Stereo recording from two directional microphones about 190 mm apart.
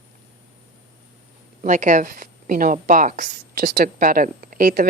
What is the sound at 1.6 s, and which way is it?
A woman's voice, 40° right (ahead or behind).